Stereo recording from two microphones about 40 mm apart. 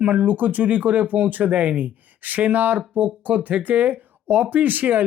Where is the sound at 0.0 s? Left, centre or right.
Right.